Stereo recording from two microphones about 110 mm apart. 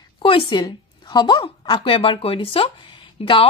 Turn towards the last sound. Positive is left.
turn(degrees=50)  # may be behind; listen again after turning